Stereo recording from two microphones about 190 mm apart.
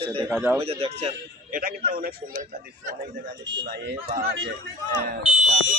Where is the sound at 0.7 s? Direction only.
30° right (ahead or behind).